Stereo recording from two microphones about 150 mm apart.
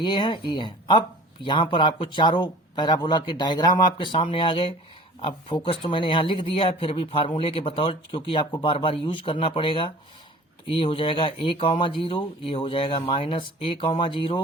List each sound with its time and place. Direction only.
0.0 s speech: 30° left (ahead or behind)